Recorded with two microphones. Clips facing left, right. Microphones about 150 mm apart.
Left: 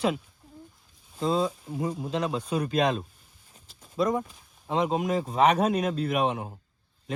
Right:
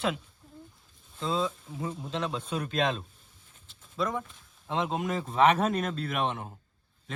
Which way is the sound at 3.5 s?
40° left (ahead or behind).